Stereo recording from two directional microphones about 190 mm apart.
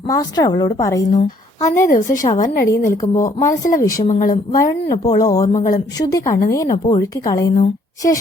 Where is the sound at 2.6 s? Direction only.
15° left (ahead or behind).